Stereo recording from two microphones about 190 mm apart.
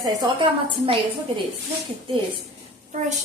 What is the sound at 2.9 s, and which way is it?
Speech, 40° right (ahead or behind).